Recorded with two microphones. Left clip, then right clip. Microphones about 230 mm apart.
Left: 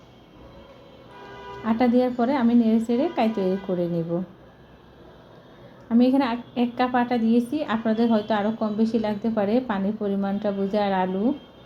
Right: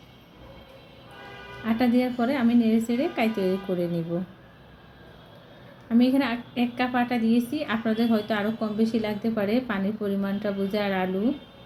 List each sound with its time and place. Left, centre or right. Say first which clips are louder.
1.6 s a woman's voice: left 3 dB; centre
5.9 s a woman's voice: left 2 dB; centre